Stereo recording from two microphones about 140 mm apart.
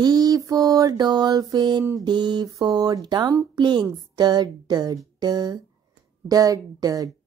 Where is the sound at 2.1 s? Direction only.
30° right (ahead or behind).